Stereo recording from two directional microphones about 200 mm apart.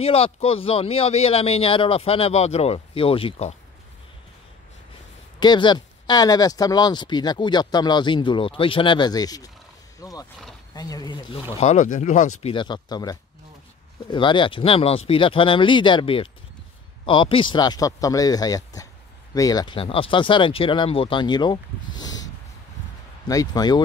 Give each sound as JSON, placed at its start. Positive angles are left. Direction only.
{"t": 0.0, "sound": "speech", "side_deg": 30}
{"t": 5.4, "sound": "speech", "side_deg": 20}
{"t": 11.6, "sound": "speech", "side_deg": 35}
{"t": 12.4, "sound": "speech", "side_deg": 25}